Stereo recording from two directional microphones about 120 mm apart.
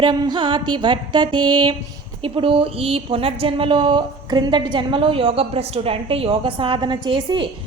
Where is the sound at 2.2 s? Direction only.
45° right (ahead or behind).